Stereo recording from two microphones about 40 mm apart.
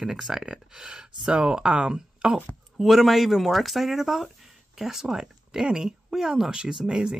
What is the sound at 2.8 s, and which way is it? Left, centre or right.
Speech, centre.